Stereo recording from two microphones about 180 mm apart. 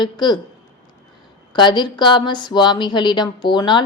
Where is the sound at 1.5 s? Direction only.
25° left (ahead or behind).